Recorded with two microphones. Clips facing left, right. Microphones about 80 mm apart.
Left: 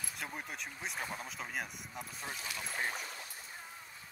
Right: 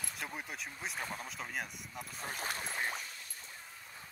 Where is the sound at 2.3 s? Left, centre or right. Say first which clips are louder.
Right 4 dB; right.